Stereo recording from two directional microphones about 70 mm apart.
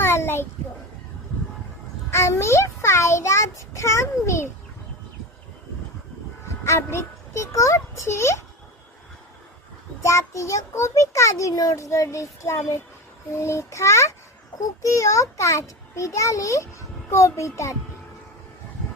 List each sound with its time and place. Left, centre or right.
0.0 s a sound: left
2.0 s a child's voice: left
6.8 s a child's voice: left
10.0 s a child's voice: left